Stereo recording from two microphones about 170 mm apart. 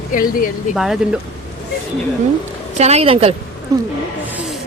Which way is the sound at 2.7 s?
40° right (ahead or behind).